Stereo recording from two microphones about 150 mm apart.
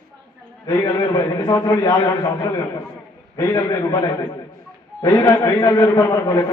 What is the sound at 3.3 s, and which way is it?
A man's voice, 20° left (ahead or behind).